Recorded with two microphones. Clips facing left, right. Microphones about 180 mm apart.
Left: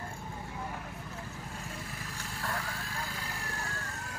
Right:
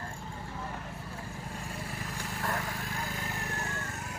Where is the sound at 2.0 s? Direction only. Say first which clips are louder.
Right 4 dB; 40° right (ahead or behind).